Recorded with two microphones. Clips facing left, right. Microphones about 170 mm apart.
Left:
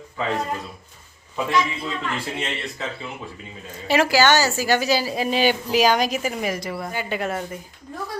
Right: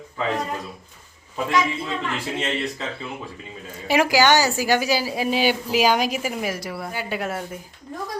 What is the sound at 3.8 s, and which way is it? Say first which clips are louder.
A woman's voice: even; 15° right (ahead or behind).